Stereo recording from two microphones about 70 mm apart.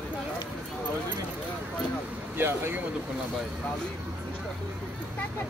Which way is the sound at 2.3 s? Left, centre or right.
Right.